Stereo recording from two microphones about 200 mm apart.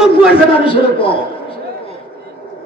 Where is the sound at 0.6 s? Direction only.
25° left (ahead or behind).